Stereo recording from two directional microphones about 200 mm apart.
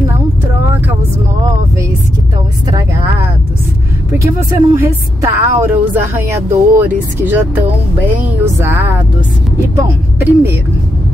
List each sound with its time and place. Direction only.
2.7 s vehicle: 15° right (ahead or behind)
4.2 s speech: 15° right (ahead or behind)
8.5 s speech: 10° right (ahead or behind)